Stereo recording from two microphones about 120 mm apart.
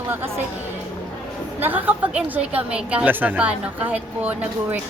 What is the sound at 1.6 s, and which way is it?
A woman's voice, 15° right (ahead or behind).